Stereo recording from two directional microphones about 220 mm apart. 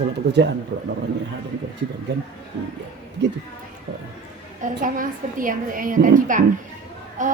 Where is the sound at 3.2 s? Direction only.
50° right (ahead or behind).